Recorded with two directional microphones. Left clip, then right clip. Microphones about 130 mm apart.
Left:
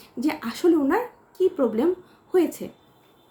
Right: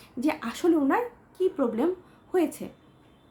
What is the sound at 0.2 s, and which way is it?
A woman's voice, 20° right (ahead or behind).